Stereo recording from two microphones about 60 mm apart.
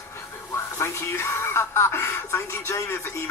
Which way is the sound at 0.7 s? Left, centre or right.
Left.